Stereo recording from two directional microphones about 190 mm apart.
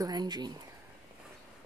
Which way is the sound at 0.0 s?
20° right (ahead or behind).